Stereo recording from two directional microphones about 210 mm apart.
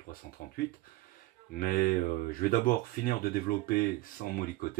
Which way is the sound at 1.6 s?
45° left (ahead or behind).